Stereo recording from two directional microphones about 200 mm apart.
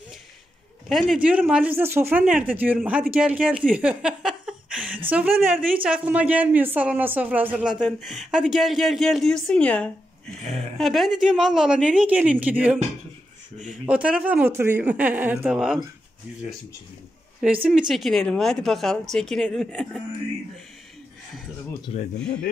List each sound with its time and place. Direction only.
0.8 s speech: centre (ahead or behind)
13.8 s speech: 5° right (ahead or behind)
17.4 s speech: 5° right (ahead or behind)